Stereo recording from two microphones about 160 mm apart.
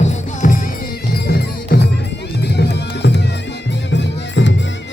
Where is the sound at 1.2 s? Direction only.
80° left.